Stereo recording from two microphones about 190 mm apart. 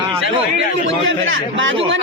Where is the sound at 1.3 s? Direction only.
85° right.